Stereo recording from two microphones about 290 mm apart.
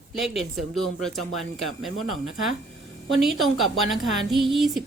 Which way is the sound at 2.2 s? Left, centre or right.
Right.